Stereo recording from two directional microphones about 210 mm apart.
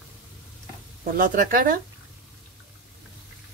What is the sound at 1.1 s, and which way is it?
Speech, 40° right (ahead or behind).